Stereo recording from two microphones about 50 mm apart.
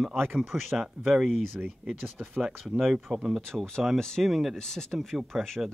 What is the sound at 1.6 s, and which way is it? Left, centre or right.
Speech, right.